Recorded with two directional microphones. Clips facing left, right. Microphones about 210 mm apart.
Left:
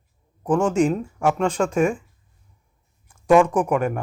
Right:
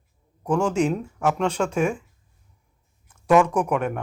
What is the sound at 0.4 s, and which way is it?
Speech, 5° left (ahead or behind).